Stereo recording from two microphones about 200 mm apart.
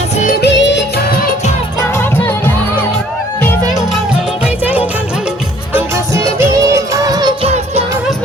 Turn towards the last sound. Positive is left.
turn(degrees=-15)  # may be behind; listen again after turning